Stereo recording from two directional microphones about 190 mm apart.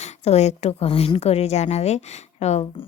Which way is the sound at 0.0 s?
35° left (ahead or behind).